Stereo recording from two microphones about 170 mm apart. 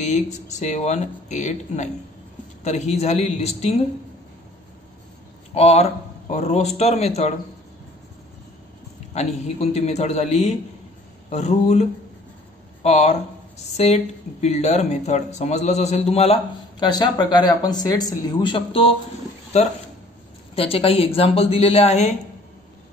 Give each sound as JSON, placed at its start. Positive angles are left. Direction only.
{"t": 0.0, "sound": "speech", "side_deg": 45}
{"t": 5.5, "sound": "speech", "side_deg": 40}
{"t": 9.1, "sound": "speech", "side_deg": 40}
{"t": 16.8, "sound": "speech", "side_deg": 25}
{"t": 20.5, "sound": "speech", "side_deg": 35}